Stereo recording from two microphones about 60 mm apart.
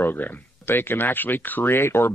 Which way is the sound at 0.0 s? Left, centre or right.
Left.